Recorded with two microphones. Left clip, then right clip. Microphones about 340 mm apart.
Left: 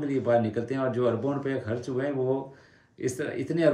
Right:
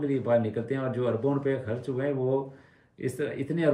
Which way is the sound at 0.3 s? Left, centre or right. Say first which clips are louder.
Left 2 dB; centre.